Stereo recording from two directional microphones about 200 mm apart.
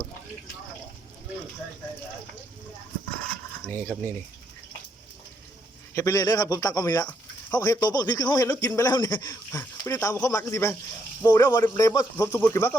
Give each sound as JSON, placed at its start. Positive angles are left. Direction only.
{"t": 3.7, "sound": "speech", "side_deg": 10}
{"t": 5.9, "sound": "speech", "side_deg": 15}